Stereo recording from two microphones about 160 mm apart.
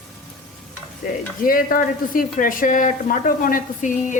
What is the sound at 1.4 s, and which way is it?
Speech, 60° left (ahead or behind).